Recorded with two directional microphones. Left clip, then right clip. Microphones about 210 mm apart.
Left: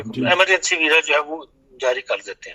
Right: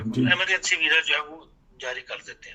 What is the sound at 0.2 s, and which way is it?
A man's voice, 40° left (ahead or behind).